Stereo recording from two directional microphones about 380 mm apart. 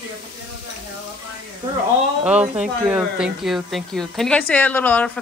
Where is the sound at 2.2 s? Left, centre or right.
Centre.